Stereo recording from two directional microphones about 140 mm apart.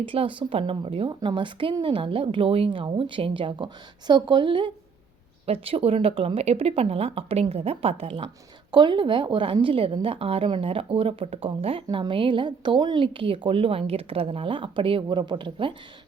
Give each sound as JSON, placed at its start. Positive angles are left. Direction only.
{"t": 0.0, "sound": "a woman's voice", "side_deg": -40}